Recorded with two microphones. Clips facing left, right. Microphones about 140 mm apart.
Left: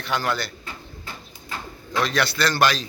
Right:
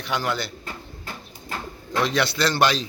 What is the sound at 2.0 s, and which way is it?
Speech, 20° right (ahead or behind).